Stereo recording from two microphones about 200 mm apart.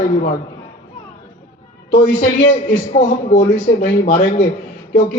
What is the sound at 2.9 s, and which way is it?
Speech, 35° left (ahead or behind).